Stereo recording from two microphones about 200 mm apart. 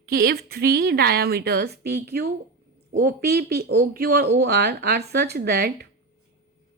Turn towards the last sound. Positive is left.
turn(degrees=-55)  # may be behind; listen again after turning